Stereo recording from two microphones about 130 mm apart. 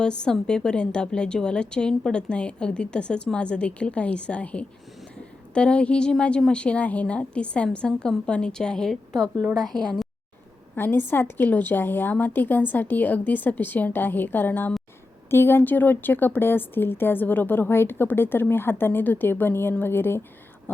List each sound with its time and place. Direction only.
0.0 s a woman's voice: 5° left (ahead or behind)
10.8 s a woman's voice: 15° left (ahead or behind)